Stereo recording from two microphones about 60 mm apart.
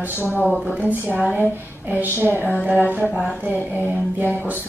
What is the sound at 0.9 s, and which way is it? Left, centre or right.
A woman's voice, right.